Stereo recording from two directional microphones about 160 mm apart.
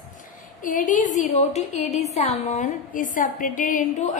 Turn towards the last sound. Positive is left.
turn(degrees=50)  # may be behind; listen again after turning